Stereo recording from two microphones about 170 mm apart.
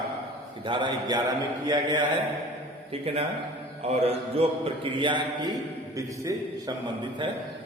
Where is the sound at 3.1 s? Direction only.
35° right (ahead or behind).